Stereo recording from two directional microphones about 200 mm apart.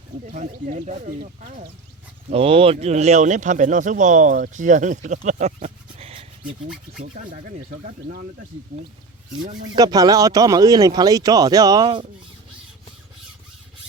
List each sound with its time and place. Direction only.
0.3 s speech: 40° right (ahead or behind)
2.3 s speech: 30° right (ahead or behind)
7.0 s speech: 40° right (ahead or behind)
9.7 s speech: 20° right (ahead or behind)